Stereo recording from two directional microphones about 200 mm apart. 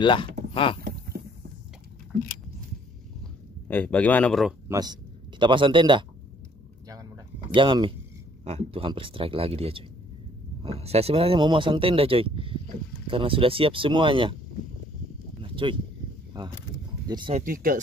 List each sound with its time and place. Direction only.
0.0 s speech: 25° left (ahead or behind)
0.8 s a sound: 50° right (ahead or behind)
3.6 s speech: 10° left (ahead or behind)
4.6 s speech: 20° right (ahead or behind)
7.5 s speech: 25° right (ahead or behind)
15.4 s a sound: 25° right (ahead or behind)
16.3 s speech: 20° right (ahead or behind)
17.4 s speech: 45° right (ahead or behind)